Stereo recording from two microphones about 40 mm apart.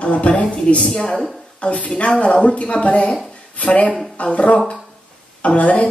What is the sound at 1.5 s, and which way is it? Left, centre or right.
A woman's voice, left.